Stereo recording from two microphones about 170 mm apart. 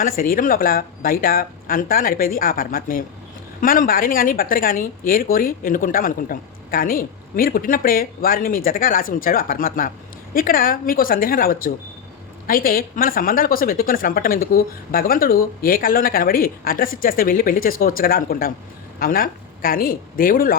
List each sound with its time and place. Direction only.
0.0 s speech: 55° left (ahead or behind)